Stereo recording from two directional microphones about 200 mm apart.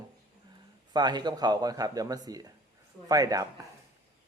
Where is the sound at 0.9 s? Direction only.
20° right (ahead or behind).